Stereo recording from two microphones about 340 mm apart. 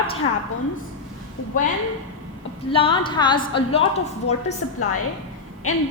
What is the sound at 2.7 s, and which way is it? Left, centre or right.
A woman's voice, centre.